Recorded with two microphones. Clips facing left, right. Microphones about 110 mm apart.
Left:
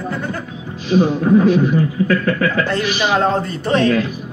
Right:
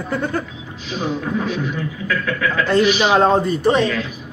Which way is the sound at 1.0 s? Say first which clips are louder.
Left 6 dB; 35° left (ahead or behind).